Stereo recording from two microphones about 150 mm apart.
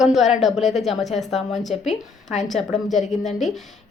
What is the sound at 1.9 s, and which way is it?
Speech, 50° left (ahead or behind).